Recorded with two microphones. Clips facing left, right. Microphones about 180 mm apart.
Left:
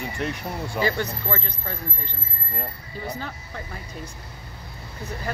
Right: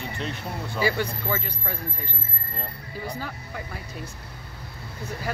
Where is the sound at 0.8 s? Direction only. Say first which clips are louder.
Right 1 dB; 10° right (ahead or behind).